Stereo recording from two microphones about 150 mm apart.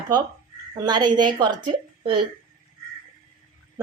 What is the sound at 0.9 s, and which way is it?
A woman's voice, 30° right (ahead or behind).